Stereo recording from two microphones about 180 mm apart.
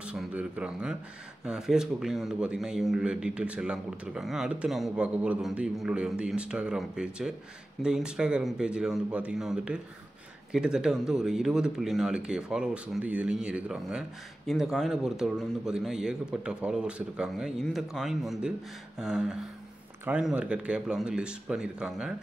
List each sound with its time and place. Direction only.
0.0 s a man's voice: 5° right (ahead or behind)